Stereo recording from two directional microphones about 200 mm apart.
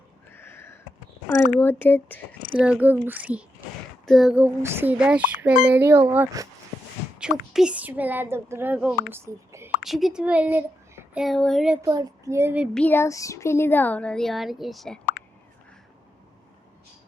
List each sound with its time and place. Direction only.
0.3 s a sound: 10° left (ahead or behind)
1.5 s speech: 10° left (ahead or behind)
2.6 s speech: 5° right (ahead or behind)
7.2 s speech: 5° right (ahead or behind)
9.8 s a child's voice: centre (ahead or behind)
11.8 s speech: 20° right (ahead or behind)
12.7 s speech: 10° left (ahead or behind)